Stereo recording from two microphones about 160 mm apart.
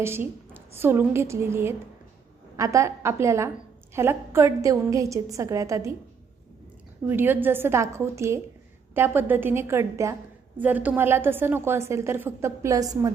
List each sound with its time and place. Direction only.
0.0 s a woman's voice: 15° right (ahead or behind)
7.1 s a woman's voice: 10° right (ahead or behind)